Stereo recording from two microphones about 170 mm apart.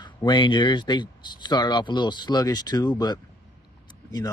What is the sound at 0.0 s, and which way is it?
A man's voice, 25° left (ahead or behind).